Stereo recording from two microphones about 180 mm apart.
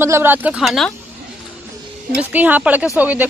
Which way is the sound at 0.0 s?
15° right (ahead or behind).